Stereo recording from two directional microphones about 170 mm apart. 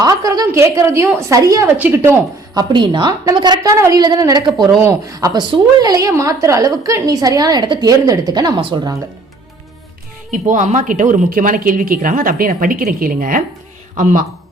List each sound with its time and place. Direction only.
0.0 s a woman's voice: 20° right (ahead or behind)
10.3 s speech: 45° right (ahead or behind)